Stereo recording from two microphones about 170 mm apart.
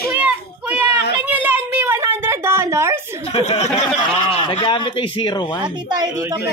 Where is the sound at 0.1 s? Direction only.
10° right (ahead or behind).